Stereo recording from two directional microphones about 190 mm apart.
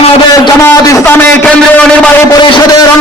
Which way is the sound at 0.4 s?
15° left (ahead or behind).